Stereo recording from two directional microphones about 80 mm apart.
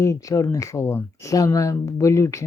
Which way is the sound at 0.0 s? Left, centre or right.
Left.